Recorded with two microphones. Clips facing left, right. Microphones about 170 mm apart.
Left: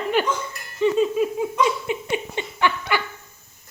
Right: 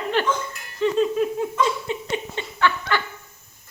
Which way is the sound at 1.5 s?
15° left (ahead or behind).